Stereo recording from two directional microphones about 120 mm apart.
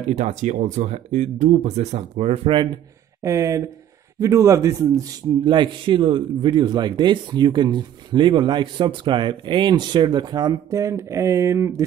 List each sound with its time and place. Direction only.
0.1 s speech: 75° right (ahead or behind); by 2.7 s 45° right (ahead or behind)
3.2 s a man's voice: 25° right (ahead or behind)